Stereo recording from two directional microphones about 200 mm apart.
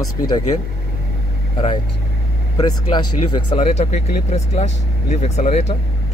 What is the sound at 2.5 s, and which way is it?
Speech, 20° left (ahead or behind).